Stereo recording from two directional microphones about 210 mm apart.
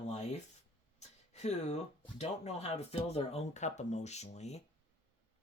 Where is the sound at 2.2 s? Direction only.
30° left (ahead or behind).